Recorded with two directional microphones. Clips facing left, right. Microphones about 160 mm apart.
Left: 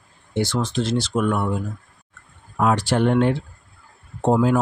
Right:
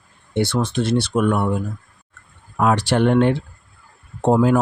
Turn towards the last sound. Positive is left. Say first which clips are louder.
# right 2 dB
turn(degrees=-65)  # may be behind; listen again after turning